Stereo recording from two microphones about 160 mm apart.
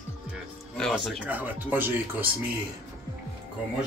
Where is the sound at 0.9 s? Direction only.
10° right (ahead or behind).